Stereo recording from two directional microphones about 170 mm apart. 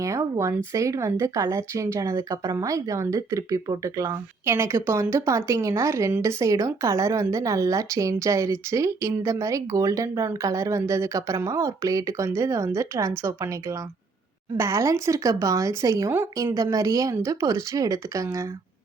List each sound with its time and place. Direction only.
0.0 s speech: 15° right (ahead or behind)